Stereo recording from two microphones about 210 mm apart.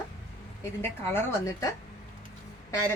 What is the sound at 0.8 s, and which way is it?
Speech, 10° left (ahead or behind).